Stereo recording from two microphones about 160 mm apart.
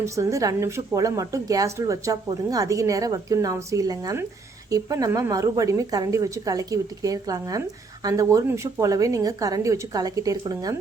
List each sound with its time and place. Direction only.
0.0 s a woman's voice: 20° right (ahead or behind)